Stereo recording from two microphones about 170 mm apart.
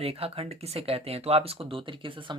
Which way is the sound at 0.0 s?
35° right (ahead or behind).